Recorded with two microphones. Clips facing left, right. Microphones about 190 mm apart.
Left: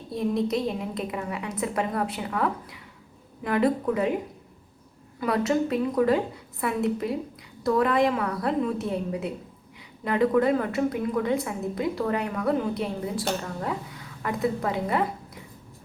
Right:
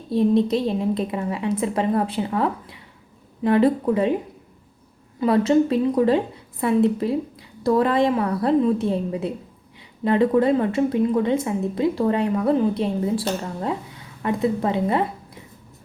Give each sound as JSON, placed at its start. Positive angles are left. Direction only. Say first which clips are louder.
{"t": 0.1, "sound": "a woman's voice", "louder": "right 7 dB", "side_deg": -30}
{"t": 5.2, "sound": "a woman's voice", "louder": "right 7 dB", "side_deg": -30}